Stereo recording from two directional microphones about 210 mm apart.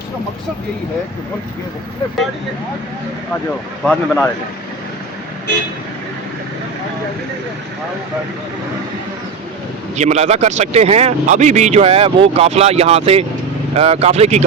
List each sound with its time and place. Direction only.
3.8 s speech: 5° left (ahead or behind)
9.9 s a man's voice: 30° right (ahead or behind)